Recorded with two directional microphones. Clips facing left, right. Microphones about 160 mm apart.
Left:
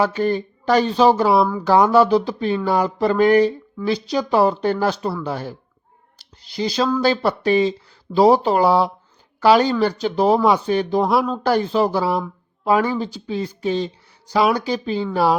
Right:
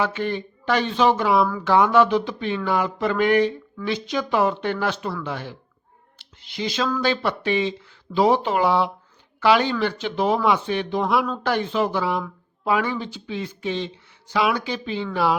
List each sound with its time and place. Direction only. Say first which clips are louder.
0.0 s speech: left 5 dB; 40° left (ahead or behind)